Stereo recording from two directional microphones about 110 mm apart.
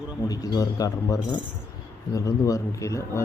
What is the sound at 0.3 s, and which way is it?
A man's voice, 35° left (ahead or behind).